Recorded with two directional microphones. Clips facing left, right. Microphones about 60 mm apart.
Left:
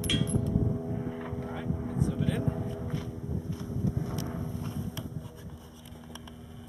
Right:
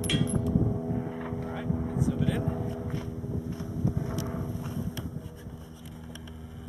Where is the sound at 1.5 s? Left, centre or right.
Centre.